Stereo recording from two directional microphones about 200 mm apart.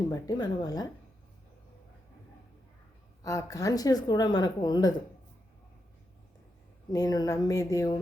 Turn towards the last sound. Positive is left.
turn(degrees=15)  # may be behind; listen again after turning